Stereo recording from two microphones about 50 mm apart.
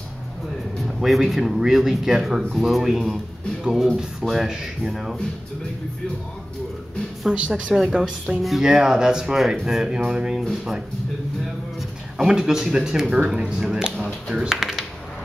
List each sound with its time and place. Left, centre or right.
0.8 s speech: centre
7.2 s speech: right
7.7 s speech: centre
8.6 s speech: centre
12.3 s speech: centre
13.9 s speech: centre
14.3 s speech: centre